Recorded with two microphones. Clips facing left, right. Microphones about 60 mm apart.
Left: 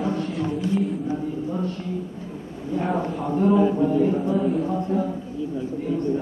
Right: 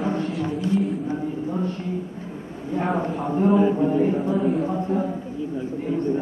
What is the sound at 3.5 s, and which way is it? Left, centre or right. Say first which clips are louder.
Speech: even; right.